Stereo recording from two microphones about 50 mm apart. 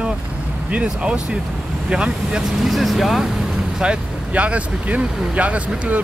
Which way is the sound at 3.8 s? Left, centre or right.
Right.